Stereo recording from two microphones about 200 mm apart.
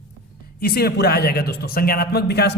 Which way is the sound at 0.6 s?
50° left (ahead or behind).